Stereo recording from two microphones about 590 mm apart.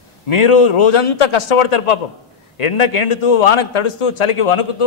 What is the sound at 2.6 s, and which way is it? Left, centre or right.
Speech, left.